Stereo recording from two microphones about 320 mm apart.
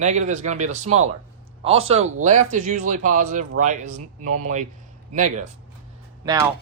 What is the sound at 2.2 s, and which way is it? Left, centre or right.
Speech, right.